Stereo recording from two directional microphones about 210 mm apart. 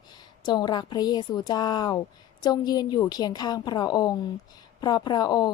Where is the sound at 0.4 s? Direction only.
20° left (ahead or behind).